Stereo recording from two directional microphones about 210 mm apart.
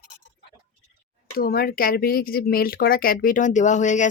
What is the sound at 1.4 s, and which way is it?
Speech, 45° left (ahead or behind).